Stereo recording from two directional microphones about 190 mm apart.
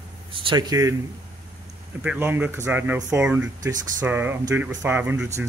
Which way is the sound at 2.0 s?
10° right (ahead or behind).